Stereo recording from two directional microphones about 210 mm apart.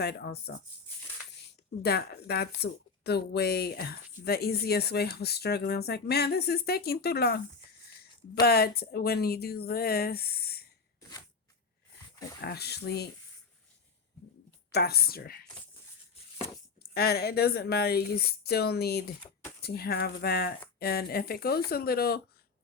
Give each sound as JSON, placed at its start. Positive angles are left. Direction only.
{"t": 0.0, "sound": "speech", "side_deg": 50}
{"t": 1.8, "sound": "speech", "side_deg": 50}
{"t": 12.4, "sound": "speech", "side_deg": 50}
{"t": 14.7, "sound": "speech", "side_deg": 50}
{"t": 16.9, "sound": "speech", "side_deg": 50}